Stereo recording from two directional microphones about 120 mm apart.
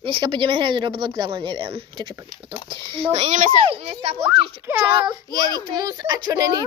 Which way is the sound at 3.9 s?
60° right (ahead or behind).